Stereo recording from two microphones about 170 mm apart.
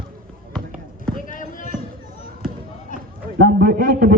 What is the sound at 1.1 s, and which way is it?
Basketball bounce, 50° left (ahead or behind).